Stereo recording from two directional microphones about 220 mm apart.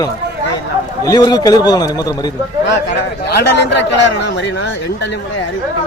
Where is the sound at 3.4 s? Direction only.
50° left (ahead or behind).